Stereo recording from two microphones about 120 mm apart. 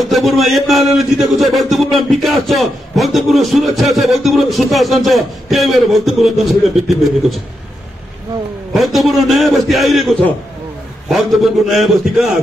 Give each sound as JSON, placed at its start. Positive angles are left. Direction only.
{"t": 0.0, "sound": "a man's voice", "side_deg": 0}
{"t": 8.7, "sound": "a man's voice", "side_deg": 0}
{"t": 11.1, "sound": "a man's voice", "side_deg": 0}